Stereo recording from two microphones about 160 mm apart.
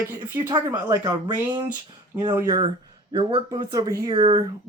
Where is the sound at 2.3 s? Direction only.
20° right (ahead or behind).